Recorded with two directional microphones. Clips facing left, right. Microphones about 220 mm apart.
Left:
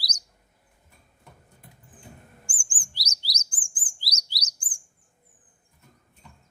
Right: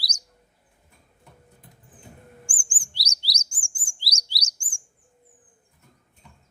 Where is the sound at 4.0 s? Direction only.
30° right (ahead or behind).